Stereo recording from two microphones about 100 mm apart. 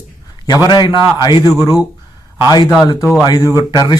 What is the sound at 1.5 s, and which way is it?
Speech, 25° right (ahead or behind).